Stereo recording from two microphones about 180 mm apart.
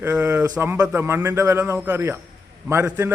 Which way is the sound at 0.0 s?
15° right (ahead or behind).